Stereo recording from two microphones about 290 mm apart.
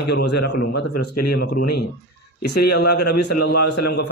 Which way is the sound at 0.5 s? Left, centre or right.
Left.